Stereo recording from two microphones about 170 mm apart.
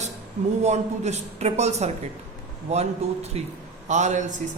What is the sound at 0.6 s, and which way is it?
A man's voice, 40° right (ahead or behind).